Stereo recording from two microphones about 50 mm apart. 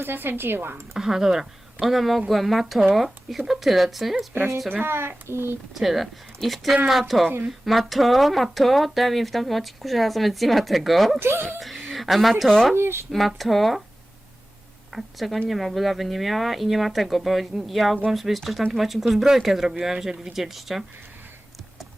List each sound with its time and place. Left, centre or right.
0.0 s speech: right
0.9 s speech: centre
4.7 s speech: right
5.7 s speech: centre
11.2 s speech: right
11.9 s speech: centre
12.7 s speech: right
13.1 s speech: centre
14.9 s speech: centre